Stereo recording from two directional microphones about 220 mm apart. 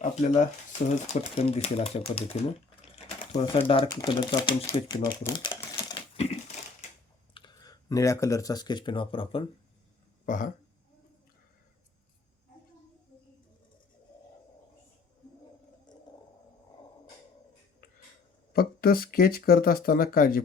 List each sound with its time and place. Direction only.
0.0 s speech: 35° left (ahead or behind); by 6.0 s 15° left (ahead or behind)
6.1 s crumpling: 30° left (ahead or behind)
7.3 s speech: 20° left (ahead or behind)
10.2 s speech: 35° left (ahead or behind)
18.5 s speech: 45° left (ahead or behind)